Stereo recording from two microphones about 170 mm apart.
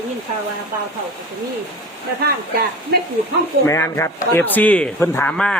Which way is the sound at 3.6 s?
15° left (ahead or behind).